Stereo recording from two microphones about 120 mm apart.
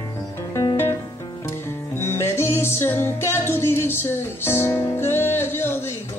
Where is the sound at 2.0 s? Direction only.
20° left (ahead or behind).